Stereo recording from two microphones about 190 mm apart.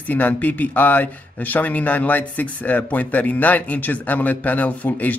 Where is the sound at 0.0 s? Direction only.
10° left (ahead or behind).